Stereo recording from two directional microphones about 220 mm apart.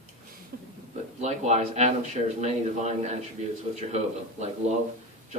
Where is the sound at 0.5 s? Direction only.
45° right (ahead or behind).